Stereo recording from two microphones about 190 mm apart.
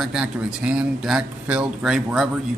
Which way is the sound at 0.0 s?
5° right (ahead or behind).